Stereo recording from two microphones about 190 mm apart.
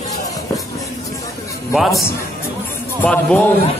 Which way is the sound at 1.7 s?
Centre (ahead or behind).